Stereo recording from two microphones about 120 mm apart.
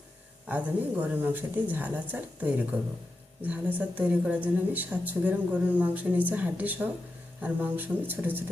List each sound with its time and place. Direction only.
0.4 s speech: 15° right (ahead or behind)